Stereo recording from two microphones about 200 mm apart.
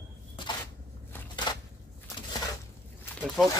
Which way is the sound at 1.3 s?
20° left (ahead or behind).